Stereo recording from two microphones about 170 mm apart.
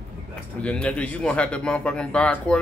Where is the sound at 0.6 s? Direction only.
5° left (ahead or behind).